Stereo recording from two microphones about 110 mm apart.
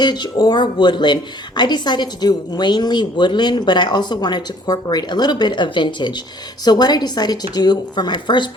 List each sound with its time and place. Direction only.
0.0 s a woman's voice: 40° left (ahead or behind)